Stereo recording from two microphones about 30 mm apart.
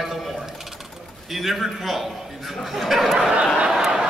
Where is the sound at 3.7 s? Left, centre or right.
Centre.